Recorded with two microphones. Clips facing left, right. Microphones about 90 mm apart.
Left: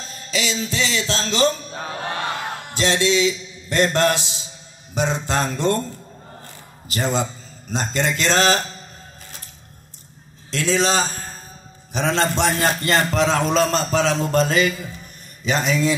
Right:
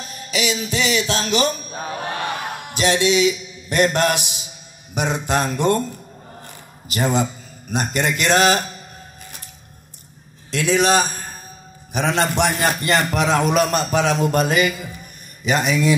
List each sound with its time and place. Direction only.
0.0 s a sound: 15° right (ahead or behind)
6.4 s a man's voice: 15° right (ahead or behind)
10.5 s a man's voice: 15° right (ahead or behind)